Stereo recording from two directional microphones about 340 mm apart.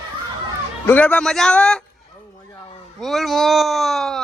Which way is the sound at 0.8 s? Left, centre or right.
Centre.